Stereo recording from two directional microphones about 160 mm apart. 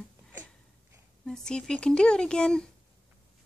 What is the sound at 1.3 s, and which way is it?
A woman's voice, 5° left (ahead or behind).